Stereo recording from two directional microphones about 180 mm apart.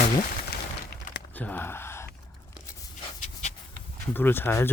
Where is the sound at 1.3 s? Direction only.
10° left (ahead or behind).